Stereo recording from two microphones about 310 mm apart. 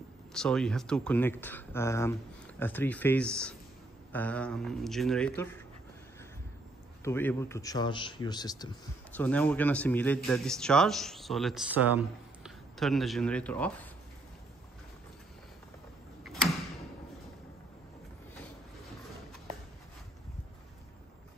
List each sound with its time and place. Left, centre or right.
0.3 s a man's voice: centre
7.1 s a man's voice: centre